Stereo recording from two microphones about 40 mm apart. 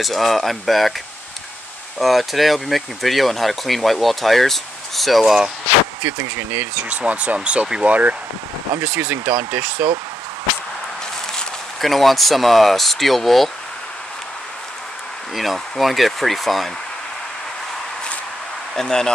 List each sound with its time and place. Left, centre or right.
0.0 s speech: centre
2.0 s speech: centre
5.2 s speech: centre
6.0 s speech: right
6.9 s speech: right
7.8 s speech: right
9.1 s speech: right
11.8 s speech: centre
15.3 s speech: centre
18.8 s speech: centre